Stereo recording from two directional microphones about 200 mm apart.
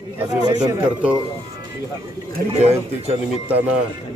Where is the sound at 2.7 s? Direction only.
30° right (ahead or behind).